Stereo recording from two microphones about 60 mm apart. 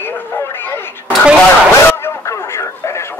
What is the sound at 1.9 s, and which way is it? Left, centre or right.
Artillery fire, left.